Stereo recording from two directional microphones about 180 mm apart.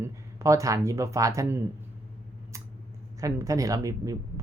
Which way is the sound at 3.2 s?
20° right (ahead or behind).